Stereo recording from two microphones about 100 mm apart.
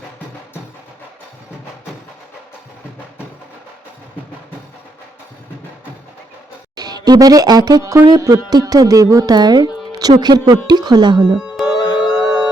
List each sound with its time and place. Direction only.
6.7 s speech: 40° right (ahead or behind)
11.3 s music: 5° right (ahead or behind)